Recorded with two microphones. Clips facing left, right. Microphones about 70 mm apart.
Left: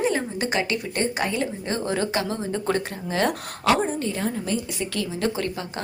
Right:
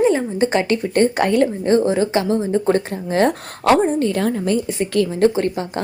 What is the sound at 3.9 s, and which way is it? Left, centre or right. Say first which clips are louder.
Speech: right 8 dB; right.